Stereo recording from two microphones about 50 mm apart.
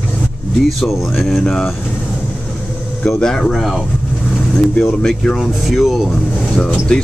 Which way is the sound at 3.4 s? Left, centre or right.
Centre.